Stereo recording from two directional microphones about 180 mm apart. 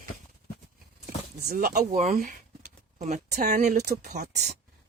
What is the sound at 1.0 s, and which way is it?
Speech, 55° right (ahead or behind).